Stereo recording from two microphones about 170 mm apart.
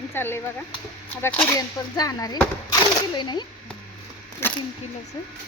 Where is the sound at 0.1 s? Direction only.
15° left (ahead or behind).